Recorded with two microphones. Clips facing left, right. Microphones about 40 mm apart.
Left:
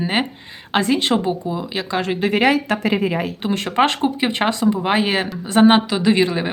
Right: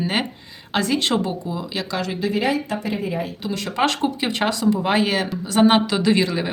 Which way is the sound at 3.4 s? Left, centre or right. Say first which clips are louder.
Left 4 dB; left.